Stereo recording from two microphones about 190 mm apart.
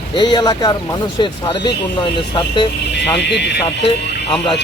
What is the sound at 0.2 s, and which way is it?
Speech, 25° left (ahead or behind).